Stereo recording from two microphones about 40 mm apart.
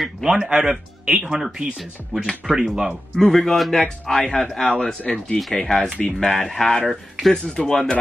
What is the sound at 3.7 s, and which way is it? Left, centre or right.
Speech, centre.